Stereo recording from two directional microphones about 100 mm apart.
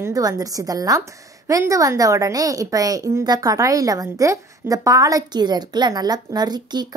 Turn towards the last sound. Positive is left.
turn(degrees=-45)  # may be behind; listen again after turning